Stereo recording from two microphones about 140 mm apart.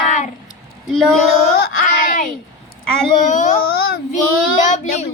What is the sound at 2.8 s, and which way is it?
Speech, 5° left (ahead or behind).